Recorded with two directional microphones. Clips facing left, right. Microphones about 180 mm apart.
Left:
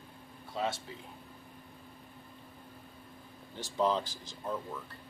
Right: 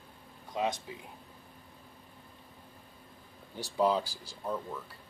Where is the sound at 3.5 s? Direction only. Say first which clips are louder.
Right 2 dB; 10° right (ahead or behind).